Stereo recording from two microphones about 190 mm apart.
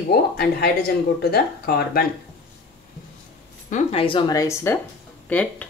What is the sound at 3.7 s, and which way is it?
Speech, 30° left (ahead or behind).